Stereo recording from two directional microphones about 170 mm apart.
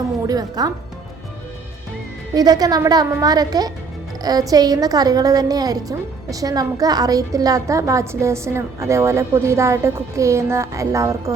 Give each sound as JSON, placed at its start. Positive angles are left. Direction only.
{"t": 0.3, "sound": "a woman's voice", "side_deg": -25}
{"t": 2.3, "sound": "a woman's voice", "side_deg": -20}